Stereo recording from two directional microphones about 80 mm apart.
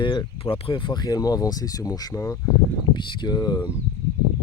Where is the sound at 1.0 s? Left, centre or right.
Left.